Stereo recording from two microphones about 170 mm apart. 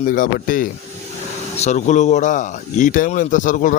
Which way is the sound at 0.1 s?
55° left (ahead or behind).